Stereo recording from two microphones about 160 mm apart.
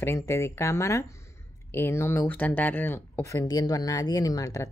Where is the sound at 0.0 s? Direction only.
15° left (ahead or behind).